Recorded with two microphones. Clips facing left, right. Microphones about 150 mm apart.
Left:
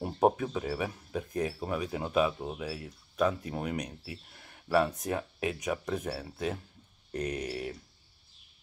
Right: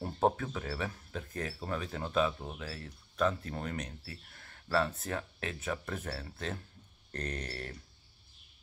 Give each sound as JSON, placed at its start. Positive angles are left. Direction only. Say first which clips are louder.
{"t": 0.0, "sound": "speech", "louder": "left 4 dB", "side_deg": 15}